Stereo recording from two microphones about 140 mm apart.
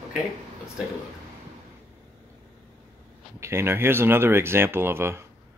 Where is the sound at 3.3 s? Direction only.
20° right (ahead or behind).